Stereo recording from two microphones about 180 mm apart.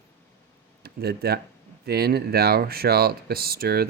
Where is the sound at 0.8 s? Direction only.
60° right (ahead or behind).